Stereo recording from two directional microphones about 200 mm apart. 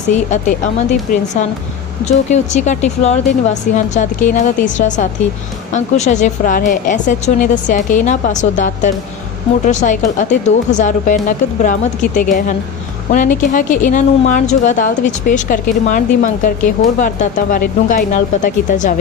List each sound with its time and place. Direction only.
0.3 s a woman's voice: 35° left (ahead or behind)